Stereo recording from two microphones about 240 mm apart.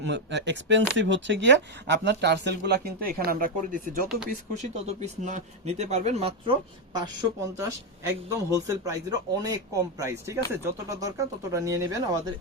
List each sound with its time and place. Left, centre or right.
0.0 s speech: right; by 12.3 s centre